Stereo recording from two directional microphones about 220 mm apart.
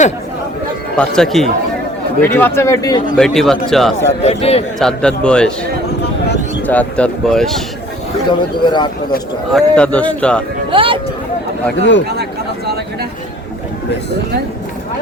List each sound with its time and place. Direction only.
0.9 s speech: 5° left (ahead or behind)
3.2 s speech: centre (ahead or behind)
4.2 s a man's voice: 30° left (ahead or behind)
4.8 s speech: 5° left (ahead or behind)
6.6 s speech: 5° left (ahead or behind)
8.6 s a man's voice: 20° left (ahead or behind)
9.5 s speech: centre (ahead or behind)
10.7 s speech: 25° right (ahead or behind)
11.8 s speech: 55° left (ahead or behind)